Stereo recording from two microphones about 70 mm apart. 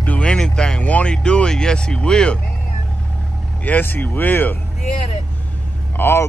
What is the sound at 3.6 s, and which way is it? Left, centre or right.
Speech, left.